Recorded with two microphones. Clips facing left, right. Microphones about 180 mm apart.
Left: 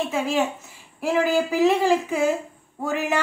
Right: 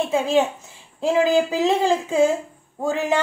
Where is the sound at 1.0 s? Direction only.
20° right (ahead or behind).